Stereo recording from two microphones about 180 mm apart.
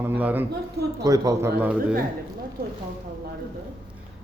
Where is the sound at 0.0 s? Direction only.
10° right (ahead or behind).